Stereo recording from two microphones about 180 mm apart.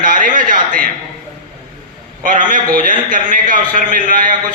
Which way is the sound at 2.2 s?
45° right (ahead or behind).